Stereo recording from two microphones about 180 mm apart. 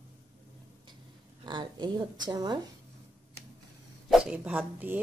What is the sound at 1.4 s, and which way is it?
A woman's voice, 25° right (ahead or behind).